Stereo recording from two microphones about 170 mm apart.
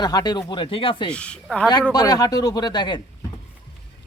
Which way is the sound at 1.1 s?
5° left (ahead or behind).